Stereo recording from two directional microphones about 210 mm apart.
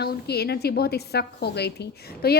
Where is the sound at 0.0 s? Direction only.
50° left (ahead or behind).